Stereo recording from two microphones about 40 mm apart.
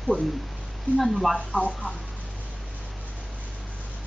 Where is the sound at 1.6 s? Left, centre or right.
Left.